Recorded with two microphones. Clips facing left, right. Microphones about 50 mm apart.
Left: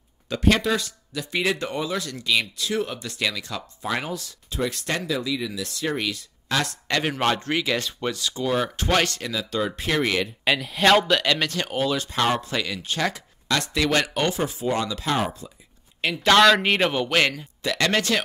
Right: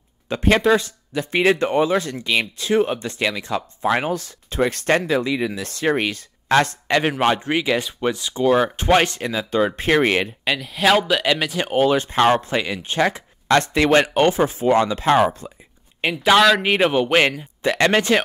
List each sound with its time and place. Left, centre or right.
0.3 s speech: right
6.9 s speech: right
10.4 s speech: centre
11.6 s speech: right
16.2 s a man's voice: centre
17.6 s speech: right